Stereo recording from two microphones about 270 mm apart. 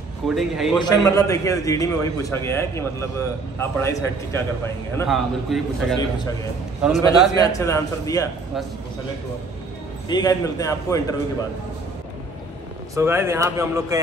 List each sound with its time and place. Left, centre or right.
0.3 s a man's voice: centre
0.7 s a man's voice: centre
4.9 s a man's voice: centre
5.9 s a man's voice: centre
6.8 s a man's voice: centre
7.3 s a man's voice: centre
10.0 s a man's voice: centre
12.9 s speech: centre